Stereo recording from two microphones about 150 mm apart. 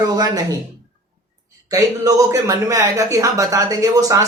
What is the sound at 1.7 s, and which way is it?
Speech, 25° right (ahead or behind).